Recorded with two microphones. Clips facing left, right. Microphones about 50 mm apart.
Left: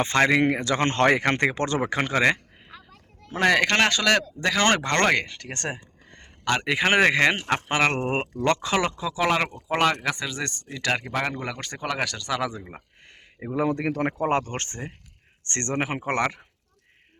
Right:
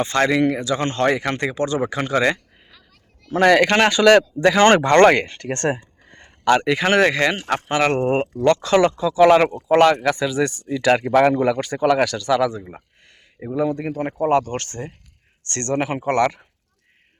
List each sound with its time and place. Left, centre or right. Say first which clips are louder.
0.0 s speech: right 2 dB; left
0.6 s speech: right 1 dB; left
2.0 s a sound: right 2 dB; left
3.3 s speech: right 6 dB; centre
3.7 s speech: right 7 dB; centre
5.2 s speech: right 9 dB; right
6.1 s a sound: right 9 dB; centre
6.7 s speech: right 3 dB; centre
8.4 s speech: right 6 dB; left
8.6 s speech: right 8 dB; centre
13.7 s speech: right 1 dB; left
14.2 s speech: right 6 dB; left; by 16.5 s centre